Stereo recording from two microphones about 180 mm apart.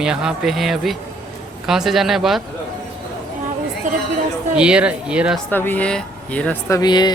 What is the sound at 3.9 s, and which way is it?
Chatter, 45° right (ahead or behind).